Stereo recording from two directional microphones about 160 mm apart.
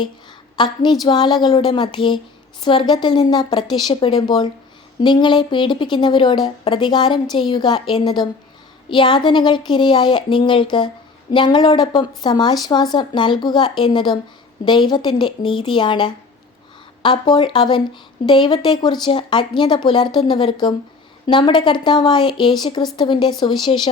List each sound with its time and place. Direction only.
0.5 s a woman's voice: 30° left (ahead or behind)